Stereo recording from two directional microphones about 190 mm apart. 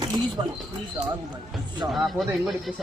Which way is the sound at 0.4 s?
20° right (ahead or behind).